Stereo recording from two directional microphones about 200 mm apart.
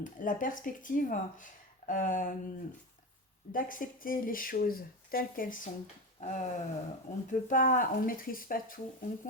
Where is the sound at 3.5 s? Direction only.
45° left (ahead or behind).